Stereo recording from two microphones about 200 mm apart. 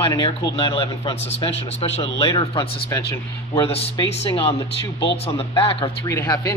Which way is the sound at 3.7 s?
30° left (ahead or behind).